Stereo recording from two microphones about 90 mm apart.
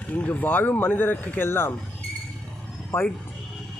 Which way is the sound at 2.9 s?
30° left (ahead or behind).